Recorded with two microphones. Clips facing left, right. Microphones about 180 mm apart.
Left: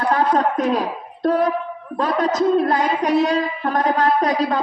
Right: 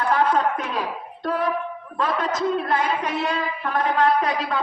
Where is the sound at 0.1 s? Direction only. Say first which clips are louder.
Left 2 dB; 35° left (ahead or behind).